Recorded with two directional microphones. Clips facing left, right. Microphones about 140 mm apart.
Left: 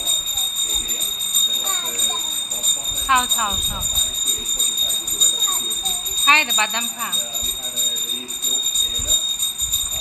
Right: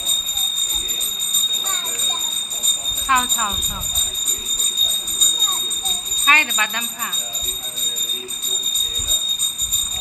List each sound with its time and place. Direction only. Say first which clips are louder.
3.1 s speech: even; 15° left (ahead or behind)
6.2 s speech: left 1 dB; 25° left (ahead or behind)